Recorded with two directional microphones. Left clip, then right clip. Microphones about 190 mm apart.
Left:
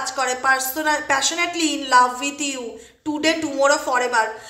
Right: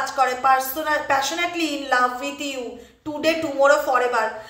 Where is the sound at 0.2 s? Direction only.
25° left (ahead or behind).